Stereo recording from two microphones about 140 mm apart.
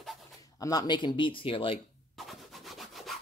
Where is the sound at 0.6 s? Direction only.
25° left (ahead or behind).